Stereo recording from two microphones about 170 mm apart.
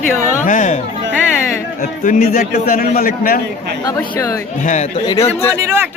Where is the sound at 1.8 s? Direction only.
55° left (ahead or behind).